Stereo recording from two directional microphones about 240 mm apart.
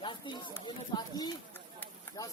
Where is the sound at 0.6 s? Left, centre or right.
Centre.